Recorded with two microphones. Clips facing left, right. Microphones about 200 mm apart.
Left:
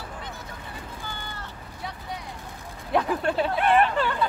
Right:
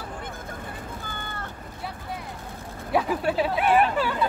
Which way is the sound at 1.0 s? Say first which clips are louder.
Right 2 dB; 50° right (ahead or behind).